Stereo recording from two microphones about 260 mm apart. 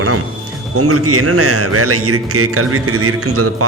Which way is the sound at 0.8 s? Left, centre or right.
Right.